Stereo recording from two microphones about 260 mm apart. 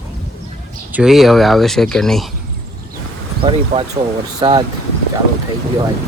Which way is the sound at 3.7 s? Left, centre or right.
Right.